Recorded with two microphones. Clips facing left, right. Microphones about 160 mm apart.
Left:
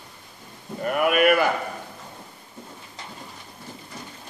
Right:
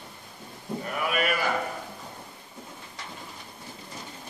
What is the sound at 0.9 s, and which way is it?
Speech, 60° left (ahead or behind).